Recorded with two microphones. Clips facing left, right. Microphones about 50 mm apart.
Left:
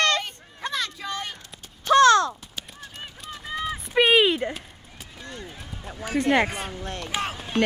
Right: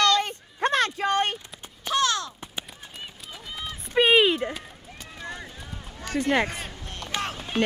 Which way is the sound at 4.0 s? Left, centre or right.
Centre.